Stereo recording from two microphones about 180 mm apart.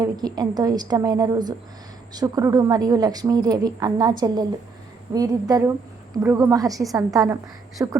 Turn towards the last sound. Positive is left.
turn(degrees=-15)  # may be behind; listen again after turning